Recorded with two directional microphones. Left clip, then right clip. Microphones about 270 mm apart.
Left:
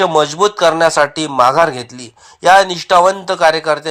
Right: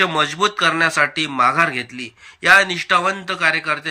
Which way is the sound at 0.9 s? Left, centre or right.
Left.